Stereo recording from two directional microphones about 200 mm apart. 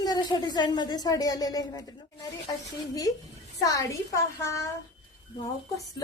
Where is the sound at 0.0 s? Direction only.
20° left (ahead or behind).